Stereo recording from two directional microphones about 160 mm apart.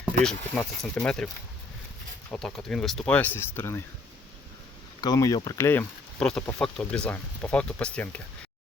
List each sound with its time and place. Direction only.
0.0 s speech: 5° left (ahead or behind)
2.3 s speech: 5° left (ahead or behind)
4.9 s speech: 25° left (ahead or behind)
6.1 s speech: 5° left (ahead or behind)